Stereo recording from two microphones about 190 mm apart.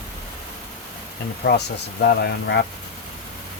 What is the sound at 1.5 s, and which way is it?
Speech, 60° left (ahead or behind).